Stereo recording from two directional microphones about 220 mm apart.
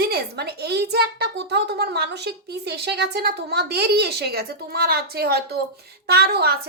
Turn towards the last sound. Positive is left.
turn(degrees=-45)  # may be behind; listen again after turning